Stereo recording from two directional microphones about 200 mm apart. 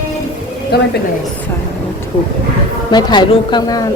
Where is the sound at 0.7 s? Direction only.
55° left (ahead or behind).